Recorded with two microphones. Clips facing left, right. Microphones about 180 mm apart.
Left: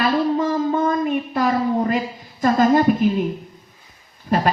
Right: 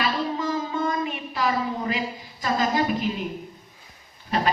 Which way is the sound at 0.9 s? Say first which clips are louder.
Left 7 dB; 50° left (ahead or behind).